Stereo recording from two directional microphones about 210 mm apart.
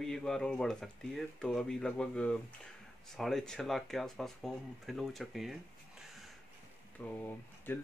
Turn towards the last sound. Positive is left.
turn(degrees=10)  # may be behind; listen again after turning